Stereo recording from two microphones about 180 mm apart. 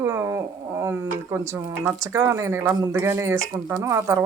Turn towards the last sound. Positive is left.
turn(degrees=-15)  # may be behind; listen again after turning